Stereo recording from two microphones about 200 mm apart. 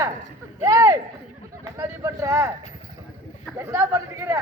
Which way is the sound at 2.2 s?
15° right (ahead or behind).